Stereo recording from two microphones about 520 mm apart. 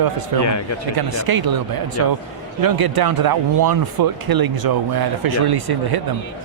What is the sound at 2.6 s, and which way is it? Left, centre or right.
Speech, right.